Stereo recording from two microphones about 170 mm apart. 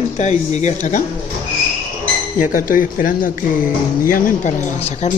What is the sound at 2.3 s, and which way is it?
Speech, 50° left (ahead or behind).